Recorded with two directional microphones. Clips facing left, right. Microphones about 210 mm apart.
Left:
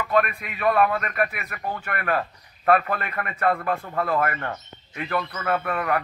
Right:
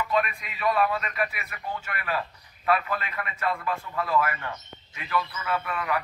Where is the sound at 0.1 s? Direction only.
60° left (ahead or behind).